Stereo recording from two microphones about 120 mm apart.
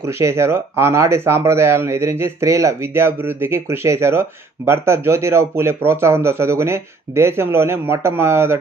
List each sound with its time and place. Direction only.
0.0 s speech: 20° right (ahead or behind)